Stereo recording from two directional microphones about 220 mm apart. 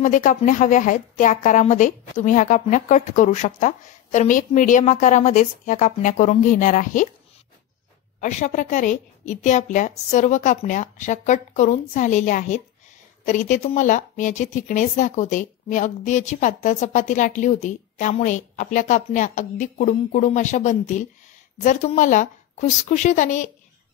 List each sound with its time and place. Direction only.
0.0 s speech: 35° left (ahead or behind)
8.2 s speech: 30° left (ahead or behind)